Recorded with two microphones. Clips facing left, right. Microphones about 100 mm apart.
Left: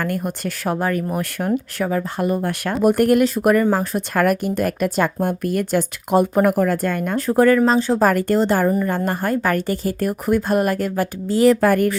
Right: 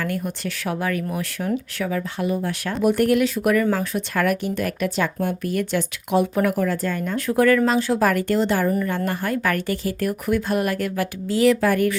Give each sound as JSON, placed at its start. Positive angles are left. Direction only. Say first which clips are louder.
{"t": 0.0, "sound": "speech", "louder": "left 3 dB", "side_deg": 45}
{"t": 7.2, "sound": "speech", "louder": "left 3 dB", "side_deg": 35}
{"t": 8.0, "sound": "speech", "louder": "left 4 dB", "side_deg": 40}